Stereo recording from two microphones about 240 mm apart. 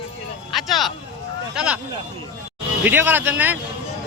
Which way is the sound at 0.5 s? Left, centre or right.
Centre.